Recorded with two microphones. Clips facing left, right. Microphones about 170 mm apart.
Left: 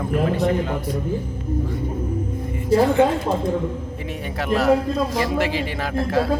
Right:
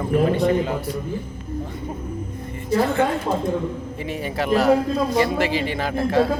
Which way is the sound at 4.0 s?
Centre (ahead or behind).